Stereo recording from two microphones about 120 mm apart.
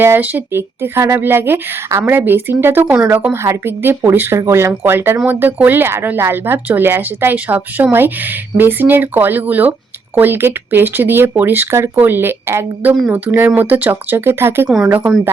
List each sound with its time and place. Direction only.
0.0 s speech: 15° right (ahead or behind)